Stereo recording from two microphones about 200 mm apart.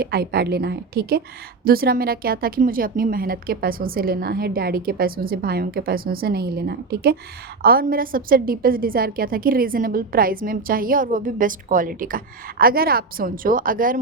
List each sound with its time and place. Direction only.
0.0 s a woman's voice: 50° right (ahead or behind)